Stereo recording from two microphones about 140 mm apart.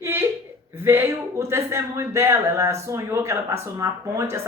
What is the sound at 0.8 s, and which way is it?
A man's voice, 20° right (ahead or behind).